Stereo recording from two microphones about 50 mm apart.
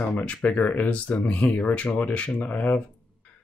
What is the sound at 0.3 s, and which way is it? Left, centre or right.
Speech, centre.